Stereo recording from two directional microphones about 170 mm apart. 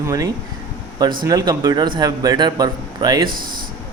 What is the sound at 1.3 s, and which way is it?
Speech, 20° right (ahead or behind).